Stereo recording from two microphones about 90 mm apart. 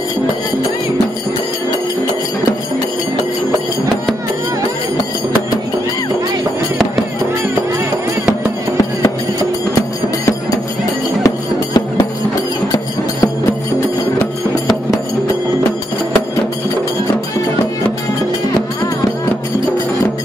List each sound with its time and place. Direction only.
11.2 s music: 40° left (ahead or behind)